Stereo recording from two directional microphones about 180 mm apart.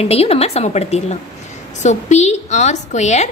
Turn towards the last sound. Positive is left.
turn(degrees=40)  # may be behind; listen again after turning